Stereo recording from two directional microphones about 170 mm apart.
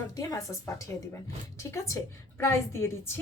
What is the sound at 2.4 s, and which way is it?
Speech, 15° left (ahead or behind).